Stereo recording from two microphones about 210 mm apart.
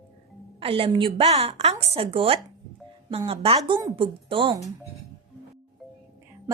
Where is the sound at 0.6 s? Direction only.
25° right (ahead or behind).